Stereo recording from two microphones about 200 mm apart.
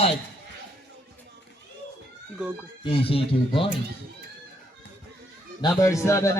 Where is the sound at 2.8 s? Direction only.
25° left (ahead or behind).